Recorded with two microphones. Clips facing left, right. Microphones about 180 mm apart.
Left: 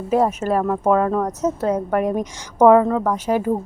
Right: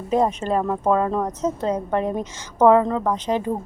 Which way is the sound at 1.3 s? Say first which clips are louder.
Left 3 dB; 10° left (ahead or behind).